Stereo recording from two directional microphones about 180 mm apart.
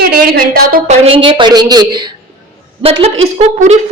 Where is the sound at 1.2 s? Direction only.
25° right (ahead or behind).